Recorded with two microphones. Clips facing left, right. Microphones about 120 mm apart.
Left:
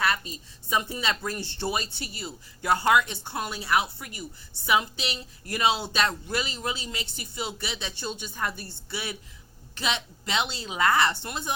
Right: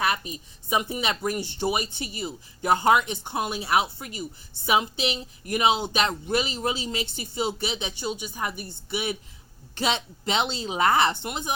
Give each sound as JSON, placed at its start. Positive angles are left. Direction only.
{"t": 0.0, "sound": "speech", "side_deg": -20}